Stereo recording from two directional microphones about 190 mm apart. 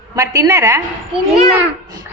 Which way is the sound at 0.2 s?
15° right (ahead or behind).